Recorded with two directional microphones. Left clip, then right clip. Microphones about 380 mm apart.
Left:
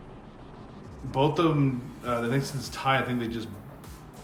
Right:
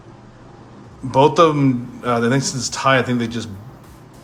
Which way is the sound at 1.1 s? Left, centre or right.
Centre.